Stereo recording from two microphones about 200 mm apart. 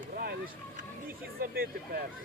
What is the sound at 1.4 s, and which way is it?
Speech, 45° right (ahead or behind).